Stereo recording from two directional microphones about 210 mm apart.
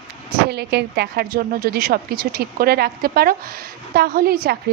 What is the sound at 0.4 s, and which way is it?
A woman's voice, 50° right (ahead or behind).